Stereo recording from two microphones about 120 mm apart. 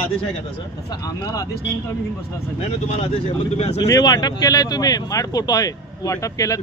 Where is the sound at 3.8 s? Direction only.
30° left (ahead or behind).